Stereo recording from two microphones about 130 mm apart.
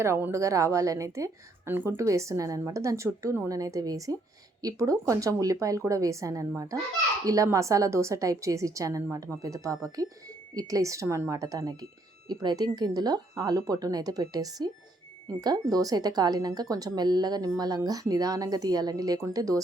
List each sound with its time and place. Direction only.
0.0 s a woman's voice: 20° right (ahead or behind)